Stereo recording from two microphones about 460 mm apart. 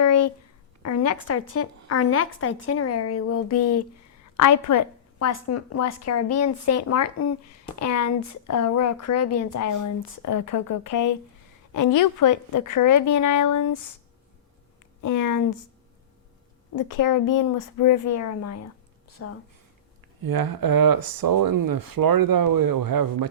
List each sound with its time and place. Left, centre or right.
0.0 s a sound: left
0.8 s a woman's voice: left
15.0 s a woman's voice: left
16.7 s a woman's voice: left
20.2 s speech: right